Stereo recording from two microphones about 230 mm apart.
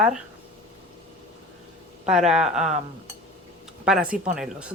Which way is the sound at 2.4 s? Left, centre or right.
Right.